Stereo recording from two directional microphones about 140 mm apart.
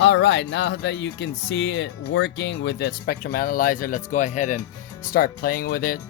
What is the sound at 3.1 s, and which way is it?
Speech, 90° left.